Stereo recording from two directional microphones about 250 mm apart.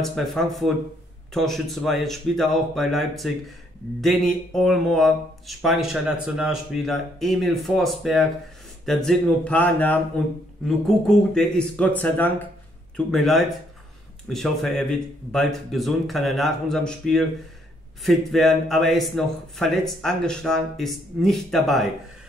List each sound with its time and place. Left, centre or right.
0.0 s a man's voice: centre
11.1 s a man's voice: centre